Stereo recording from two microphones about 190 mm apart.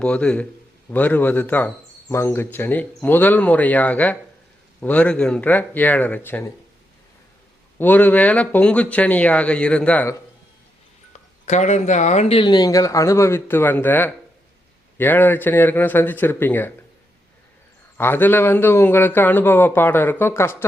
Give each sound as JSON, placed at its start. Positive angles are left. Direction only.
{"t": 0.0, "sound": "a man's voice", "side_deg": 5}
{"t": 7.8, "sound": "speech", "side_deg": 10}
{"t": 11.4, "sound": "speech", "side_deg": 40}
{"t": 17.9, "sound": "speech", "side_deg": 10}